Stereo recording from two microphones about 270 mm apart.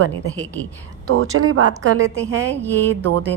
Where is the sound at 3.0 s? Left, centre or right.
Right.